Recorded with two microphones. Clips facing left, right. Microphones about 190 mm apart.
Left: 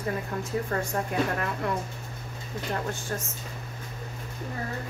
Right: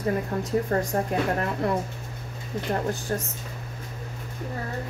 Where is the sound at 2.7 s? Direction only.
35° right (ahead or behind).